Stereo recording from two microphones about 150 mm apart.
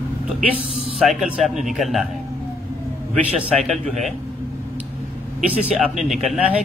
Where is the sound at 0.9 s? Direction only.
5° right (ahead or behind).